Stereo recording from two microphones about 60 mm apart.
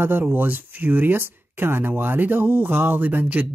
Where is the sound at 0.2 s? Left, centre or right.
Right.